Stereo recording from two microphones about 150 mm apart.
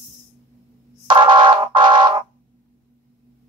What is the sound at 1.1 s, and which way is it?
Music, 30° right (ahead or behind).